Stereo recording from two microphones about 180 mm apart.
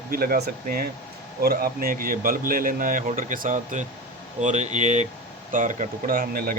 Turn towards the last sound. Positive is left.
turn(degrees=-50)  # may be behind; listen again after turning